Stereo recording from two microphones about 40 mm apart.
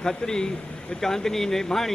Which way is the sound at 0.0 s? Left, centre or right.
Centre.